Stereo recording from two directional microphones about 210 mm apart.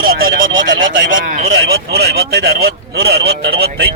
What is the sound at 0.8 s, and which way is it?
Speech, 60° right (ahead or behind).